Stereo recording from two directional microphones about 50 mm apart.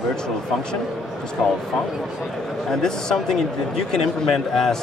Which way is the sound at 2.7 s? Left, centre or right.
Centre.